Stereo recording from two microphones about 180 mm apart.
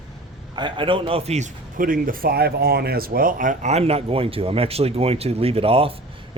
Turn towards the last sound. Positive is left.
turn(degrees=-30)  # may be behind; listen again after turning